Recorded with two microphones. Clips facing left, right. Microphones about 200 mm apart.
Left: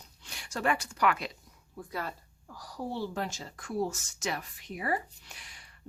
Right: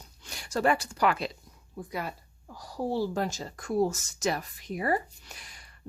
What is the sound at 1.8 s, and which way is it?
Speech, 15° right (ahead or behind).